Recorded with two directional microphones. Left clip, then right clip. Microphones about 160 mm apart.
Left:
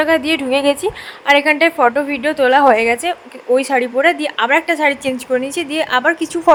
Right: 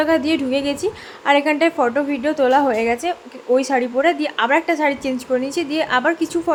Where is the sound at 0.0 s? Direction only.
15° left (ahead or behind).